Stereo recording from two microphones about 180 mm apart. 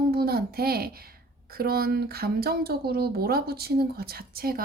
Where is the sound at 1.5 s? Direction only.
60° right (ahead or behind).